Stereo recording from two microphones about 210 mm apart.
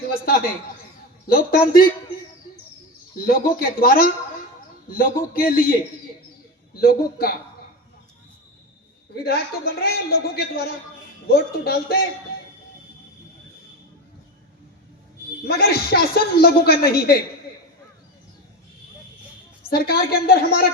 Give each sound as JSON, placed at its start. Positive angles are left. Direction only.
{"t": 0.1, "sound": "a man's voice", "side_deg": 45}
{"t": 3.2, "sound": "a man's voice", "side_deg": 45}
{"t": 6.7, "sound": "a man's voice", "side_deg": 45}
{"t": 9.1, "sound": "a man's voice", "side_deg": 50}
{"t": 15.4, "sound": "a man's voice", "side_deg": 50}
{"t": 19.7, "sound": "a man's voice", "side_deg": 45}